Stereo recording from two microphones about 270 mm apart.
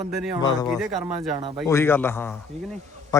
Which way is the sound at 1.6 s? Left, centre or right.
Centre.